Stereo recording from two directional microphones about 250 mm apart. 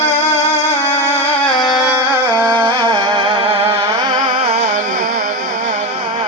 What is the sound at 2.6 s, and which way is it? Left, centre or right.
Music, centre.